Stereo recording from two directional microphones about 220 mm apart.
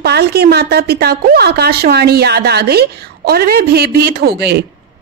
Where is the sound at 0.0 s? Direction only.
45° right (ahead or behind).